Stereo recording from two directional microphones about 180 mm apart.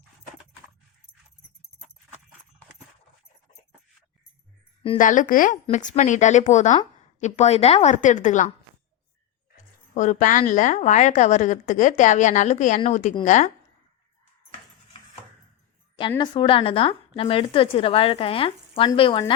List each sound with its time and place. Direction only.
4.9 s a woman's voice: 45° left (ahead or behind)
9.9 s a woman's voice: 45° left (ahead or behind)
16.0 s a woman's voice: 25° left (ahead or behind)